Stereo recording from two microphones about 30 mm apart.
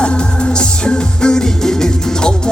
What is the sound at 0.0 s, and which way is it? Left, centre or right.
Music, left.